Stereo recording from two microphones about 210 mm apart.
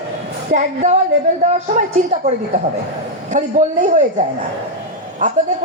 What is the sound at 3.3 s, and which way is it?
Speech, 35° right (ahead or behind).